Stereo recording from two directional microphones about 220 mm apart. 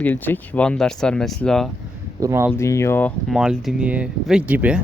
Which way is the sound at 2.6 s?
15° left (ahead or behind).